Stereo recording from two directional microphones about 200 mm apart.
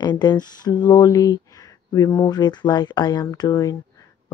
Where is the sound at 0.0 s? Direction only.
20° left (ahead or behind).